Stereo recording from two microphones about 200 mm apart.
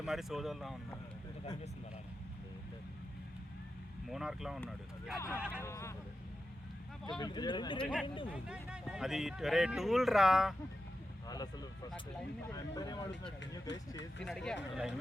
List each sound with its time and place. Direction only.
0.0 s speech: centre (ahead or behind)
4.1 s speech: centre (ahead or behind)
5.1 s speech: 15° left (ahead or behind)
7.2 s speech: 20° left (ahead or behind)
8.3 s speech: 5° right (ahead or behind)
11.3 s vehicle: 20° left (ahead or behind)
12.5 s speech: 15° left (ahead or behind)
13.7 s speech: 65° left (ahead or behind)
14.3 s speech: 5° left (ahead or behind)